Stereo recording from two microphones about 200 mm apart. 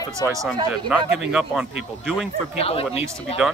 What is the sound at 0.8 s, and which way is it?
Speech, 5° right (ahead or behind).